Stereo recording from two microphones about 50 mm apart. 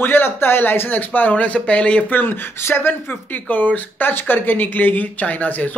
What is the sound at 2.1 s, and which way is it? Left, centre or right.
Speech, left.